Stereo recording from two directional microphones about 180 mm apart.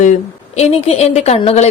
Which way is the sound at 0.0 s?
40° left (ahead or behind).